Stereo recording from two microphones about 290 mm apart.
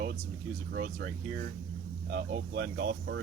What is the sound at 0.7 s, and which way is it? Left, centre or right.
Speech, right.